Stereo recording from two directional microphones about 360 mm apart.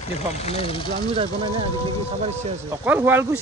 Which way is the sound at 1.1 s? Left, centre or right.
Centre.